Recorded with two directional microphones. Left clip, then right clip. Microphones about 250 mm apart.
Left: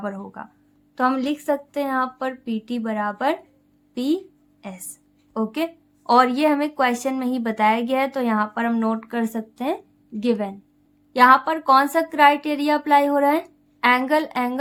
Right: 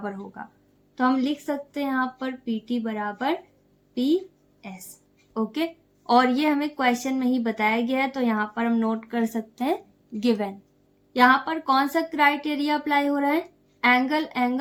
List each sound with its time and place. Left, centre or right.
0.0 s speech: left
0.9 s speech: left
5.3 s speech: left; by 10.5 s centre
11.1 s speech: left